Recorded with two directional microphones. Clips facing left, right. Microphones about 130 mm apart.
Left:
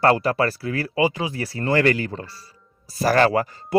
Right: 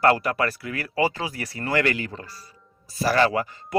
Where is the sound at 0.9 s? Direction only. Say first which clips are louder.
Left 2 dB; 20° left (ahead or behind).